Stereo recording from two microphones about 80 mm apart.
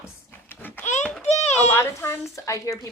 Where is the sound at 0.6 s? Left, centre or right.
Left.